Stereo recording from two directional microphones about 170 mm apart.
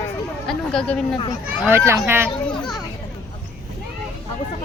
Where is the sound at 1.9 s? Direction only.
15° right (ahead or behind).